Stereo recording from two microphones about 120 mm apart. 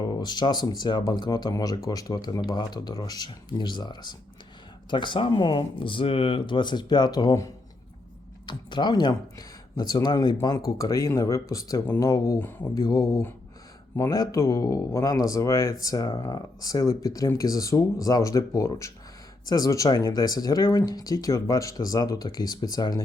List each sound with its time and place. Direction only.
0.0 s speech: 35° left (ahead or behind)